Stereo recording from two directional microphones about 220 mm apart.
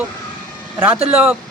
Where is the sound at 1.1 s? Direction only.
5° right (ahead or behind).